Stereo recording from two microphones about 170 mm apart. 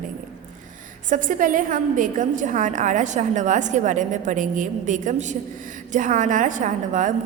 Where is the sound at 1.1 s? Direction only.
50° right (ahead or behind).